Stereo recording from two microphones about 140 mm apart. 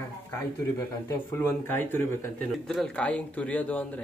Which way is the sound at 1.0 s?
15° left (ahead or behind).